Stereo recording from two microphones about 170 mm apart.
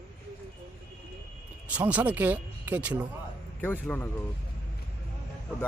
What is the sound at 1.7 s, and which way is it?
Speech, 10° right (ahead or behind).